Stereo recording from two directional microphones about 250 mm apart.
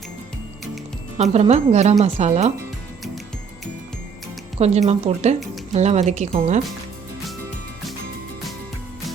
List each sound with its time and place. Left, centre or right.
1.2 s a woman's voice: right
4.5 s a woman's voice: right